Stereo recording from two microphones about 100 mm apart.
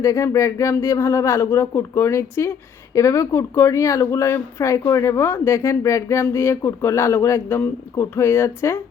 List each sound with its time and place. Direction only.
0.0 s speech: 30° left (ahead or behind)